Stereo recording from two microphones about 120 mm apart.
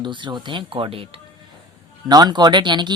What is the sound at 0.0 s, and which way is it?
Speech, 40° right (ahead or behind).